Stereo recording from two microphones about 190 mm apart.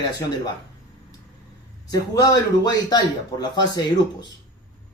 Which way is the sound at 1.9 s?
20° left (ahead or behind).